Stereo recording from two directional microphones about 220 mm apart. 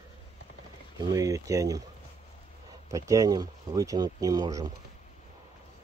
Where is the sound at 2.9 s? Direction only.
15° right (ahead or behind).